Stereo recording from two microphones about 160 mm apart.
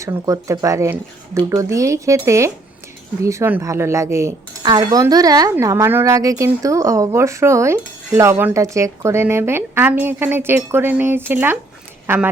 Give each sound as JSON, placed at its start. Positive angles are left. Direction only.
{"t": 0.0, "sound": "speech", "side_deg": -20}